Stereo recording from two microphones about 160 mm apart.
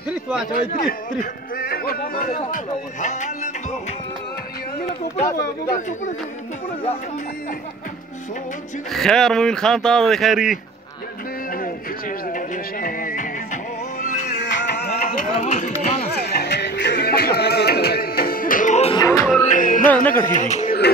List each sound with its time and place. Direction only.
0.5 s a man's voice: 65° left (ahead or behind)
2.2 s speech: 55° left (ahead or behind)
5.8 s speech: 50° left (ahead or behind)
8.9 s speech: 5° left (ahead or behind)
11.5 s music: 60° left (ahead or behind)
14.2 s music: 90° left
15.4 s speech: 45° left (ahead or behind)
16.3 s music: 90° left; by 18.9 s 55° left (ahead or behind)
18.9 s music: 25° left (ahead or behind)
19.4 s music: 55° left (ahead or behind)
19.9 s speech: 10° left (ahead or behind)
20.2 s speech: 50° left (ahead or behind)